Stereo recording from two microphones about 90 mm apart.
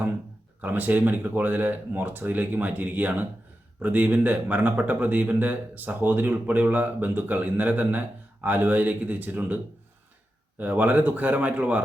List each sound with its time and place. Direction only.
0.6 s a man's voice: 20° right (ahead or behind)
10.6 s speech: 20° right (ahead or behind)